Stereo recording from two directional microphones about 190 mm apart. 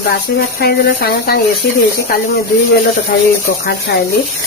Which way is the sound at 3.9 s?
60° left (ahead or behind).